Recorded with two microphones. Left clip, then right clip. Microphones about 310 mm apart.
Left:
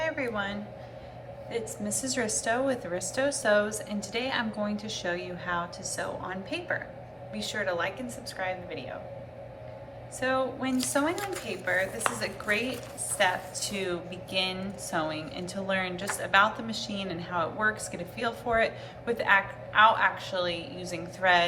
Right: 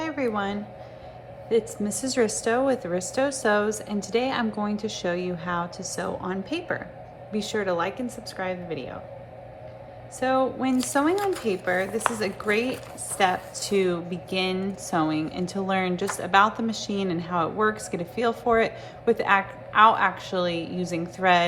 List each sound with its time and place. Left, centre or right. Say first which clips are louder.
0.0 s a sound: right 3 dB; centre
1.5 s a woman's voice: right 10 dB; right
10.2 s a woman's voice: right 5 dB; right